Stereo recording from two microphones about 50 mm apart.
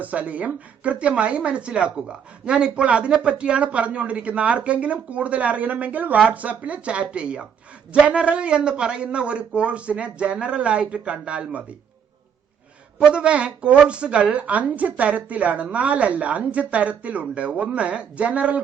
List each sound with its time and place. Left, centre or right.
0.0 s a woman's voice: right
13.1 s a woman's voice: right